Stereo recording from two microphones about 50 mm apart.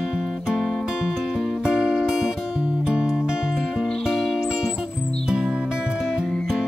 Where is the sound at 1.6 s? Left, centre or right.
Centre.